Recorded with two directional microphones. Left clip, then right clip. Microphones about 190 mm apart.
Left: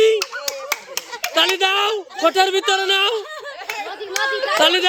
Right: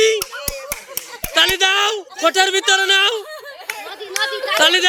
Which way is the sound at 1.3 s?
Centre (ahead or behind).